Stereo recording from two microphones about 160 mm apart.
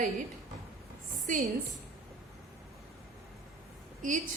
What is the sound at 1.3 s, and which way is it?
Speech, 55° right (ahead or behind).